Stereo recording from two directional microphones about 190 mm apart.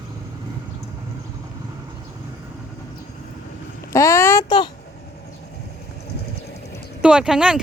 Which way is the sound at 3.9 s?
15° left (ahead or behind).